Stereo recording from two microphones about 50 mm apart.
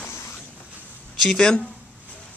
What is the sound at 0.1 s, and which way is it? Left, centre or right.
Train, left.